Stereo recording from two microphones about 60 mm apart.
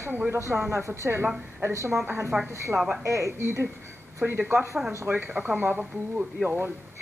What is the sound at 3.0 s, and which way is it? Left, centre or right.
Speech, right.